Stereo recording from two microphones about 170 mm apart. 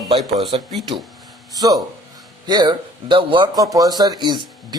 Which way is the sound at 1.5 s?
20° right (ahead or behind).